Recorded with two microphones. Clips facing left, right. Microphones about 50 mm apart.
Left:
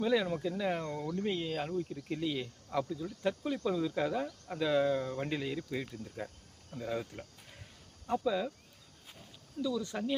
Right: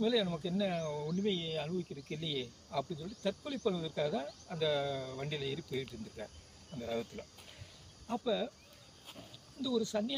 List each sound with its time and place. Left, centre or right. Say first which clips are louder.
0.0 s speech: left 2 dB; left
9.6 s speech: right 1 dB; left